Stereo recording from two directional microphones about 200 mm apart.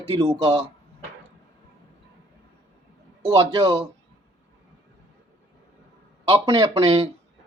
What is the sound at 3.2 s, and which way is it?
Speech, 20° right (ahead or behind).